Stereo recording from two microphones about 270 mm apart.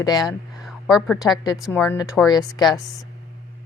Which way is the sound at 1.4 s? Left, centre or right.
Centre.